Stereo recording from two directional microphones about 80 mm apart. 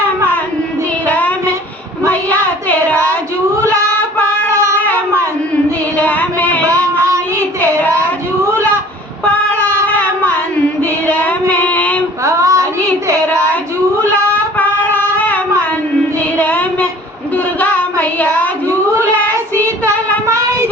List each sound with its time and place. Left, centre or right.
1.0 s child singing: centre
6.0 s female singing: left
9.2 s a sound: left
11.0 s child singing: centre
12.2 s child singing: right
14.6 s a sound: left
16.4 s child singing: left
17.3 s a sound: left
20.2 s child singing: right